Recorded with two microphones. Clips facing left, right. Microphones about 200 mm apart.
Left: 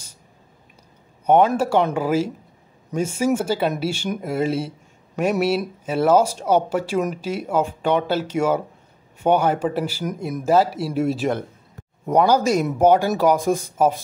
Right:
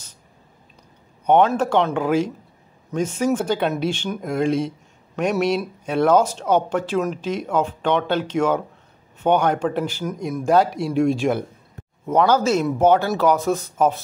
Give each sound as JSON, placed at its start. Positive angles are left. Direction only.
{"t": 1.2, "sound": "speech", "side_deg": 10}